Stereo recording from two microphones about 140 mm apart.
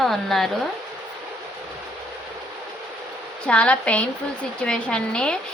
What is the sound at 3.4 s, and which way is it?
Speech, 10° left (ahead or behind).